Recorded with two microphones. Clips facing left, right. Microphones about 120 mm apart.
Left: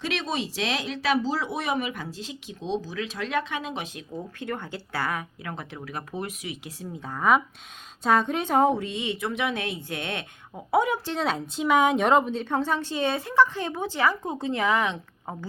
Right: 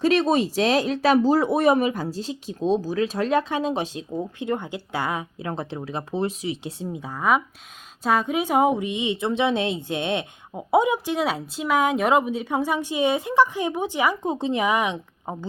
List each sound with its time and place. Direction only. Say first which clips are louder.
0.0 s speech: right 10 dB; 40° right (ahead or behind)
4.1 s speech: right 5 dB; 20° right (ahead or behind)
7.0 s a woman's voice: even; 5° right (ahead or behind)